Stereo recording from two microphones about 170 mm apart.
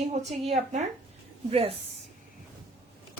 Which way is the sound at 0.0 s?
40° right (ahead or behind).